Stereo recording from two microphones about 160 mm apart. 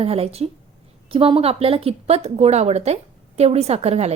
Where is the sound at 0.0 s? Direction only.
40° right (ahead or behind).